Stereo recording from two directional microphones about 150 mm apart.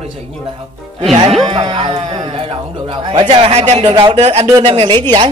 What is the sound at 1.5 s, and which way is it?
A man's voice, 35° right (ahead or behind).